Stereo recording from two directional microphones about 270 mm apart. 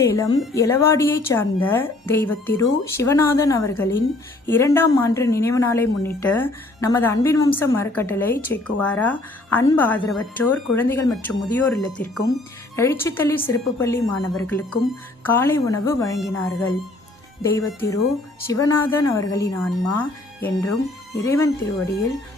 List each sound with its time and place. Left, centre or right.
0.0 s a woman's voice: centre
16.1 s speech: centre
17.4 s a woman's voice: centre